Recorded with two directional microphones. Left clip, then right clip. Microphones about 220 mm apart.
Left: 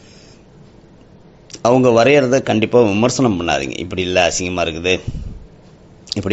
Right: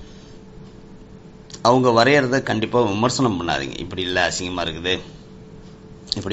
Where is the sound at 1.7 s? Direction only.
45° left (ahead or behind).